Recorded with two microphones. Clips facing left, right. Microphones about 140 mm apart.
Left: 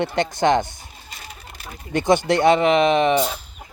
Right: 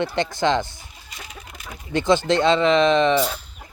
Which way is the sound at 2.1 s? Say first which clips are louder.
Left 2 dB; 15° left (ahead or behind).